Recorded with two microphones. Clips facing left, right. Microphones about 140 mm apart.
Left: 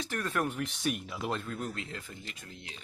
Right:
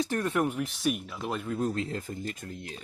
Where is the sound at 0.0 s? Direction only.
25° right (ahead or behind).